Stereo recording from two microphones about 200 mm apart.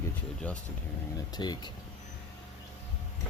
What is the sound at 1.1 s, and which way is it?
Speech, 20° left (ahead or behind).